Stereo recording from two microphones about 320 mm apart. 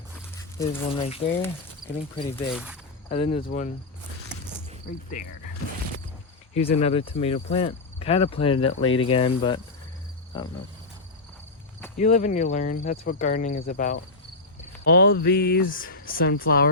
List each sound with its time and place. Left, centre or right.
0.7 s cricket: centre
2.5 s speech: centre
3.1 s speech: left
6.5 s cricket: centre
11.9 s speech: left